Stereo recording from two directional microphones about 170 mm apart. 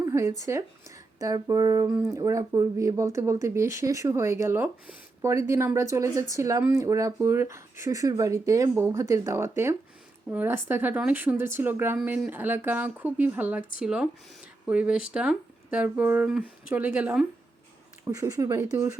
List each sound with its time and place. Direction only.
0.0 s speech: 15° right (ahead or behind)